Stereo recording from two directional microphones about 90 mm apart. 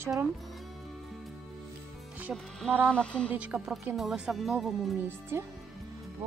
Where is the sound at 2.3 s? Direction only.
10° right (ahead or behind).